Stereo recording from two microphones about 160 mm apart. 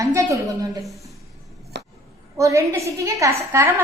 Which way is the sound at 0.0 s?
20° right (ahead or behind).